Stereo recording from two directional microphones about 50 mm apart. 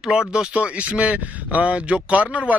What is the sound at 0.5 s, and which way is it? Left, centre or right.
A man's voice, right.